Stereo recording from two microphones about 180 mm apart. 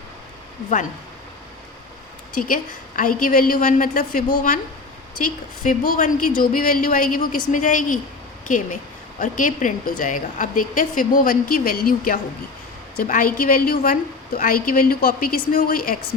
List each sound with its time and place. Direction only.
2.3 s a woman's voice: 50° left (ahead or behind)